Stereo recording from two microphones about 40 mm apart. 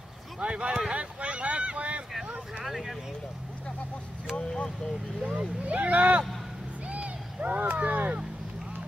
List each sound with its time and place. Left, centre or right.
0.4 s boat: right
2.6 s speech: centre
4.5 s speech: left
5.3 s speech: right
6.9 s owl: right
7.4 s speech: right